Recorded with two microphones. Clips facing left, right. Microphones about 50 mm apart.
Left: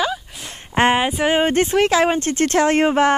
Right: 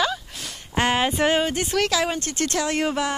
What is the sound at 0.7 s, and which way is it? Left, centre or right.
Speech, left.